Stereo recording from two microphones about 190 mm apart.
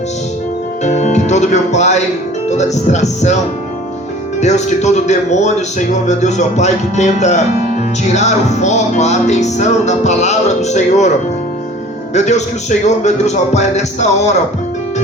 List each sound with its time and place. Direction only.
0.9 s music: 35° left (ahead or behind)
4.4 s music: 35° left (ahead or behind)
12.1 s music: 35° left (ahead or behind)